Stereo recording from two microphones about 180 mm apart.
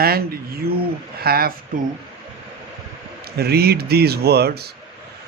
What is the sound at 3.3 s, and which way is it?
Speech, 60° right (ahead or behind).